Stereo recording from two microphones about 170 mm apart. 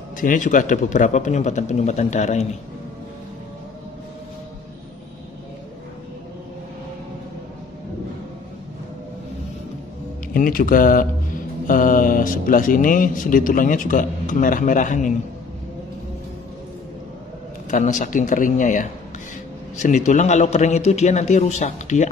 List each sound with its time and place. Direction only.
0.2 s speech: 50° left (ahead or behind)
10.3 s speech: 55° left (ahead or behind)
17.6 s speech: 50° left (ahead or behind)